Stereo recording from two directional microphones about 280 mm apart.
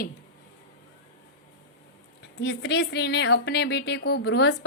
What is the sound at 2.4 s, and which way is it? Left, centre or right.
Speech, left.